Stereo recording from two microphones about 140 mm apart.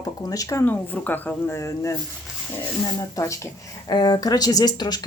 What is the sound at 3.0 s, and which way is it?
Speech, 25° left (ahead or behind).